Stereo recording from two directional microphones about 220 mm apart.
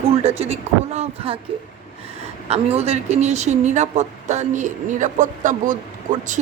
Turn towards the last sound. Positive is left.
turn(degrees=-35)  # may be behind; listen again after turning